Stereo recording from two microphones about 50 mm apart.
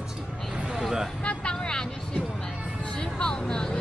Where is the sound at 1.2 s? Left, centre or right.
Centre.